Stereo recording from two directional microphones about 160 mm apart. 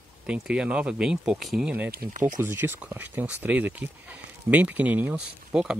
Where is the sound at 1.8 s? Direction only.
70° right (ahead or behind).